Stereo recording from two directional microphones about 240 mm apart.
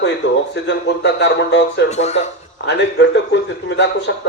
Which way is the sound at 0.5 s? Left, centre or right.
Left.